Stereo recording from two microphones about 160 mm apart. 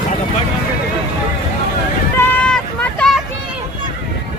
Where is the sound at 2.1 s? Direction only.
5° left (ahead or behind).